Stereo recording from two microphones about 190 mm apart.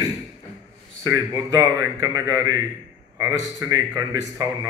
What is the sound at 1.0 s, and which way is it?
A man's voice, 20° right (ahead or behind).